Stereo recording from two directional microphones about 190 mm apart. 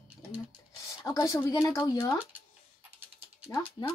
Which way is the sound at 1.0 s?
20° left (ahead or behind).